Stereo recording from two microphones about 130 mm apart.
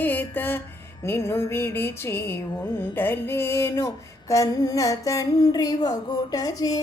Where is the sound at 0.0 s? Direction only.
15° left (ahead or behind).